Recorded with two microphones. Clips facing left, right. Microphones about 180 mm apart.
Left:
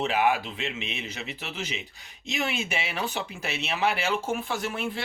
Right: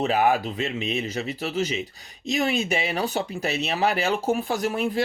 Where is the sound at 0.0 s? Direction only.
40° right (ahead or behind).